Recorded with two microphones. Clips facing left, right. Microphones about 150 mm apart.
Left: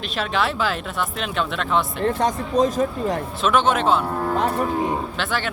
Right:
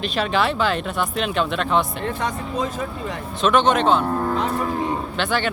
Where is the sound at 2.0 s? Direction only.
40° left (ahead or behind).